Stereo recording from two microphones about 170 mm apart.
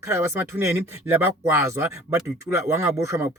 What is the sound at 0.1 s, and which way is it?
Speech, 15° right (ahead or behind).